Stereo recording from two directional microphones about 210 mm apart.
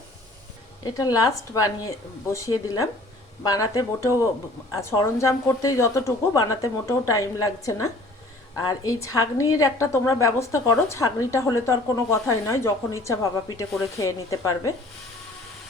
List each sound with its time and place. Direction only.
0.9 s a woman's voice: 15° left (ahead or behind)